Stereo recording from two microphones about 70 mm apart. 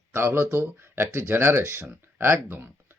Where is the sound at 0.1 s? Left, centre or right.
Right.